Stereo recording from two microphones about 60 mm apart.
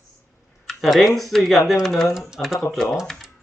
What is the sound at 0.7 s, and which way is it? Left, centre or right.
Speech, centre.